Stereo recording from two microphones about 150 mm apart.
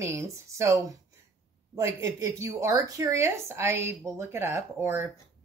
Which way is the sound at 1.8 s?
20° right (ahead or behind).